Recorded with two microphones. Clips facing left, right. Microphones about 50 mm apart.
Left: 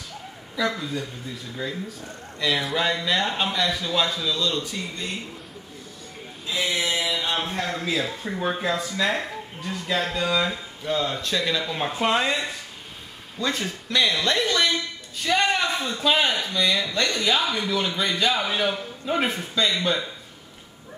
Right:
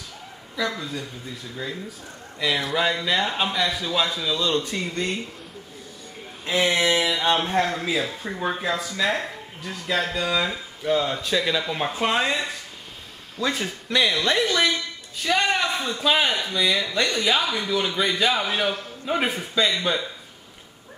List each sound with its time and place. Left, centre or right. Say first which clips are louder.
0.6 s speech: left 2 dB; centre
2.4 s speech: right 1 dB; centre
4.4 s speech: right 5 dB; right
4.6 s a sound: right 5 dB; right
6.4 s a sound: right 5 dB; right
7.7 s a man's voice: right 1 dB; centre